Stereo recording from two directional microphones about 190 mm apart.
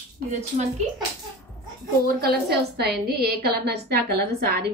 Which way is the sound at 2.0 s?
55° right (ahead or behind).